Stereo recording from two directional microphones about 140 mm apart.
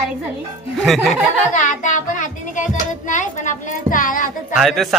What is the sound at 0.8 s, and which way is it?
Speech, centre (ahead or behind).